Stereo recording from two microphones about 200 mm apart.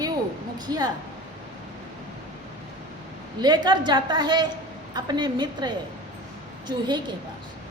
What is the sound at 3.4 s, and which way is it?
A woman's voice, 20° right (ahead or behind).